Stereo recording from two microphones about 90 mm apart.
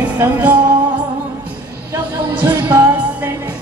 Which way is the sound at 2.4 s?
20° right (ahead or behind).